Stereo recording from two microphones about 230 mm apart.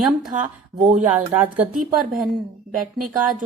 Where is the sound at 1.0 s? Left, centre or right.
Centre.